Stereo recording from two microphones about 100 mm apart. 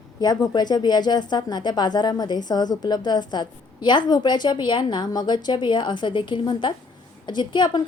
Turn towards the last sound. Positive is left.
turn(degrees=50)  # may be behind; listen again after turning